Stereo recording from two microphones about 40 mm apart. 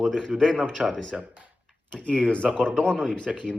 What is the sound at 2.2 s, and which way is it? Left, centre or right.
Speech, left.